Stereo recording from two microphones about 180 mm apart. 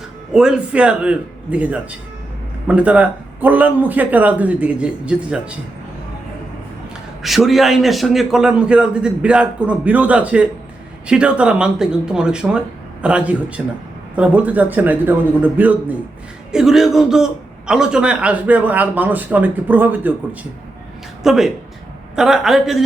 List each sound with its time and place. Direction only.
0.3 s a man's voice: 5° right (ahead or behind)
7.2 s a man's voice: centre (ahead or behind)
21.2 s a man's voice: centre (ahead or behind)